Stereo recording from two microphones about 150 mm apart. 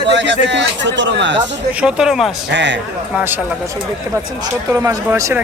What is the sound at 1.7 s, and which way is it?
Speech, 5° right (ahead or behind).